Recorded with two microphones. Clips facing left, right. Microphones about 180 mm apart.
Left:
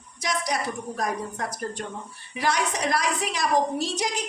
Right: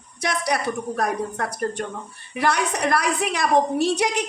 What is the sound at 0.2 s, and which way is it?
Speech, 65° right (ahead or behind).